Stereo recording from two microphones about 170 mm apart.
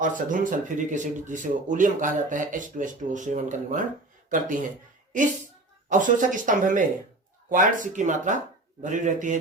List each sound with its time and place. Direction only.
0.0 s speech: 50° right (ahead or behind)
5.9 s speech: 50° right (ahead or behind)